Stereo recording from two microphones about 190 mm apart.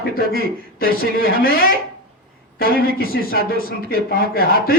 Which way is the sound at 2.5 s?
50° left (ahead or behind).